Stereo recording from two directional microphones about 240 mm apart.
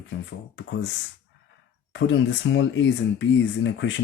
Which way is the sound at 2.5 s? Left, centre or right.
Left.